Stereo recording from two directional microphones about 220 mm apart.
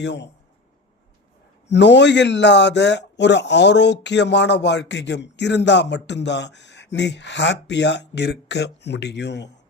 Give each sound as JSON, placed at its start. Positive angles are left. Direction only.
{"t": 0.0, "sound": "a man's voice", "side_deg": 50}
{"t": 1.6, "sound": "a man's voice", "side_deg": 50}